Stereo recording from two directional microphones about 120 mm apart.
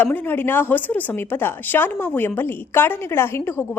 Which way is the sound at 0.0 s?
15° left (ahead or behind).